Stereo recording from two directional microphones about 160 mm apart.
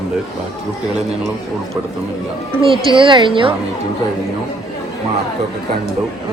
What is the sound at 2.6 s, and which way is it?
Speech, 30° right (ahead or behind).